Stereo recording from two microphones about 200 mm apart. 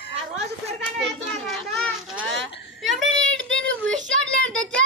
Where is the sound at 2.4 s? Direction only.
Centre (ahead or behind).